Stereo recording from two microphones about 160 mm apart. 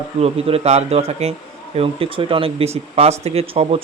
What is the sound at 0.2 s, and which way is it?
Speech, 40° right (ahead or behind).